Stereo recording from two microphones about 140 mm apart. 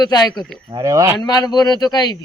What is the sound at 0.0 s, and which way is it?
Speech, 30° left (ahead or behind).